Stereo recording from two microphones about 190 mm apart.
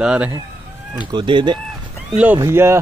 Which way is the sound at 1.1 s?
25° right (ahead or behind).